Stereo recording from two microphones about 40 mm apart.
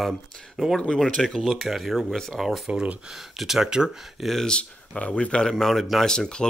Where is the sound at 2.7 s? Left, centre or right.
Right.